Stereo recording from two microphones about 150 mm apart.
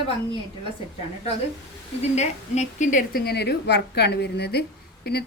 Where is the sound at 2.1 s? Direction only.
50° left (ahead or behind).